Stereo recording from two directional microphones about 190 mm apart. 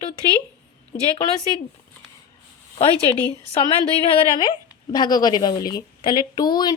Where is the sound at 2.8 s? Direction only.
30° left (ahead or behind).